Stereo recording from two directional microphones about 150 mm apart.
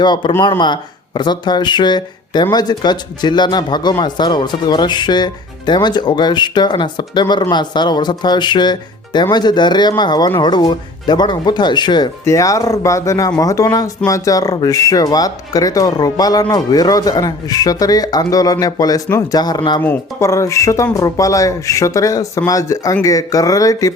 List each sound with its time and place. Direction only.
0.0 s speech: 30° left (ahead or behind)
19.8 s speech: 15° left (ahead or behind)